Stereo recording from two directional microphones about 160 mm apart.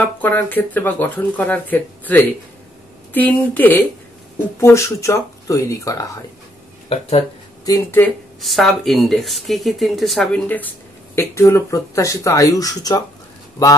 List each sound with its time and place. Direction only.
0.0 s speech: 10° left (ahead or behind)
7.6 s speech: 20° left (ahead or behind)
8.4 s speech: centre (ahead or behind); by 13.0 s 20° left (ahead or behind)